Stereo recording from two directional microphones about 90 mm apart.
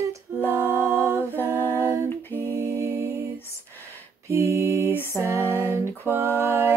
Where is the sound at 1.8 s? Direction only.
30° right (ahead or behind).